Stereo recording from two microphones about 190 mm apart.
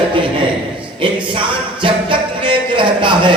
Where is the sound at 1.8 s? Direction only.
25° right (ahead or behind).